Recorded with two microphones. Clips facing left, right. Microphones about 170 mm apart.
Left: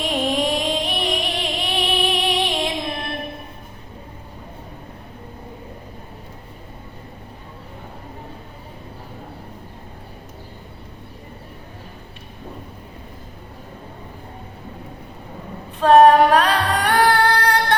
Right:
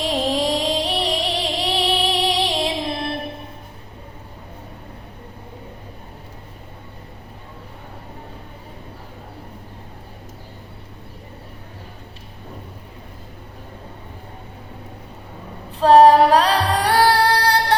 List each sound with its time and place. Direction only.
0.0 s music: 35° right (ahead or behind)
15.8 s music: 35° right (ahead or behind)